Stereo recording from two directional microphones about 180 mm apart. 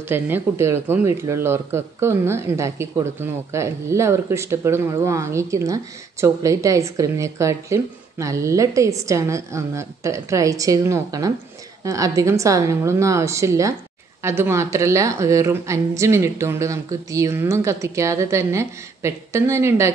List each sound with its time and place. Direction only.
0.1 s speech: 15° right (ahead or behind)